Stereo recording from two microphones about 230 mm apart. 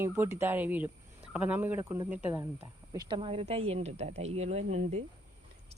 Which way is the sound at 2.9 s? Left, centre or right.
Centre.